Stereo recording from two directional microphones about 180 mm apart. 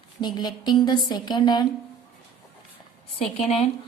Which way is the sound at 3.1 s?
35° left (ahead or behind).